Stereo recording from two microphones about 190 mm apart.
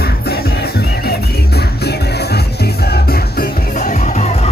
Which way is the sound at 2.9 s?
55° left (ahead or behind).